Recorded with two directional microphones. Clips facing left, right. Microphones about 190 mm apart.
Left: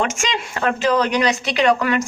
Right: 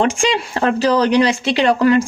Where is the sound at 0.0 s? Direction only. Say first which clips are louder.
Right 6 dB; 30° right (ahead or behind).